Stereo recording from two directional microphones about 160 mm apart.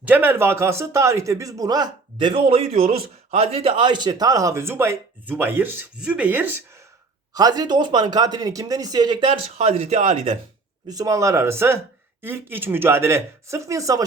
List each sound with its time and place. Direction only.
0.1 s speech: 15° right (ahead or behind)
7.3 s speech: 25° right (ahead or behind); by 10.3 s 40° right (ahead or behind)
10.8 s speech: 25° right (ahead or behind)